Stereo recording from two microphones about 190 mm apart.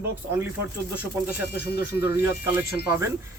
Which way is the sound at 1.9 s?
10° right (ahead or behind).